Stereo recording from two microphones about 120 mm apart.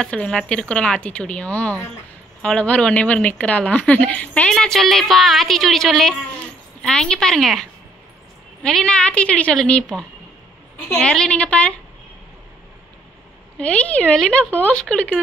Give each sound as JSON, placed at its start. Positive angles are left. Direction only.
{"t": 0.0, "sound": "a woman's voice", "side_deg": 10}
{"t": 8.6, "sound": "a woman's voice", "side_deg": 5}
{"t": 13.6, "sound": "a woman's voice", "side_deg": 10}